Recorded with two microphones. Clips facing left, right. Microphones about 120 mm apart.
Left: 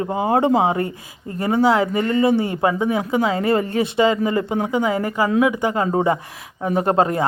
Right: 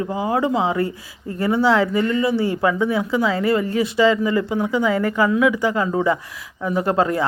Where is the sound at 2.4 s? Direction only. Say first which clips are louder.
Even; 20° left (ahead or behind).